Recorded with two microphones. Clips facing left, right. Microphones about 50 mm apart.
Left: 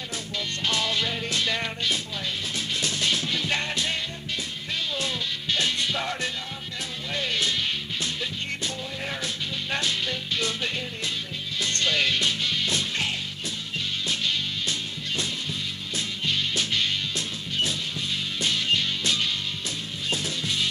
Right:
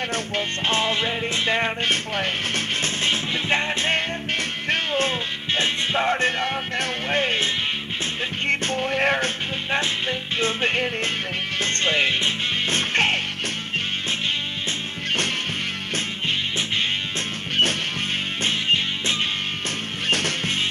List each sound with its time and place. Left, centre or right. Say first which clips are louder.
0.7 s music: right 3 dB; right
1.9 s speech: right 6 dB; right
3.0 s music: right 3 dB; right
3.9 s music: right 7 dB; right
6.4 s music: right 10 dB; right
8.5 s music: right 9 dB; right
9.7 s music: right 4 dB; right
11.6 s music: right 3 dB; right
12.6 s music: right 6 dB; right
18.4 s music: right 3 dB; right
20.1 s music: right 6 dB; right